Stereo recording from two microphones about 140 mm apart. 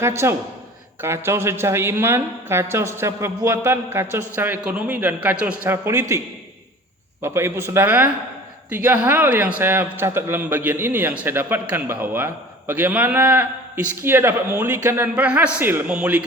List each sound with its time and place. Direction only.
0.0 s a man's voice: 20° right (ahead or behind)